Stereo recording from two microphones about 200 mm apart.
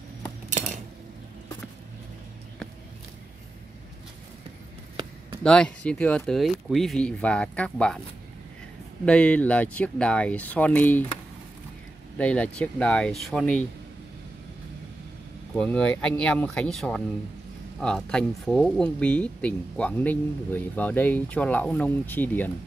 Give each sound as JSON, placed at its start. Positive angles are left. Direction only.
{"t": 0.5, "sound": "cutlery", "side_deg": -35}
{"t": 5.4, "sound": "speech", "side_deg": 5}
{"t": 9.0, "sound": "speech", "side_deg": 5}
{"t": 12.2, "sound": "speech", "side_deg": 5}
{"t": 15.5, "sound": "speech", "side_deg": 5}